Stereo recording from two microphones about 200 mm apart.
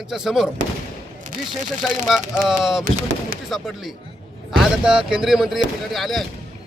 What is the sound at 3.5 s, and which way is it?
Speech, centre (ahead or behind).